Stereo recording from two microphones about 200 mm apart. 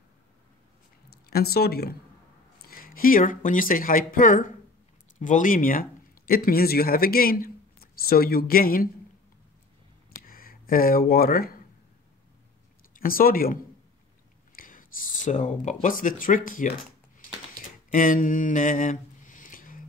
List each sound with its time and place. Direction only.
1.3 s speech: 50° left (ahead or behind)
10.2 s speech: 45° left (ahead or behind)
12.9 s speech: 45° left (ahead or behind)
17.9 s mantra: 40° left (ahead or behind)